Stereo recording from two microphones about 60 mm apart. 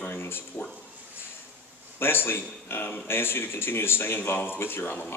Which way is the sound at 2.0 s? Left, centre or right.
Left.